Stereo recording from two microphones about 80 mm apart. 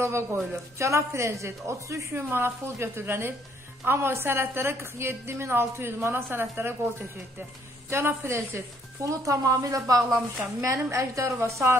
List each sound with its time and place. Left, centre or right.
0.0 s a woman's voice: right